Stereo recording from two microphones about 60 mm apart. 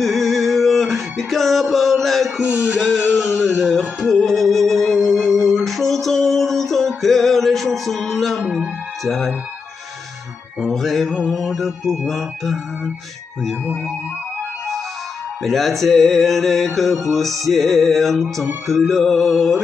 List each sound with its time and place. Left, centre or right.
0.0 s music: centre
2.4 s music: right
2.8 s music: centre
10.6 s music: centre
15.4 s music: centre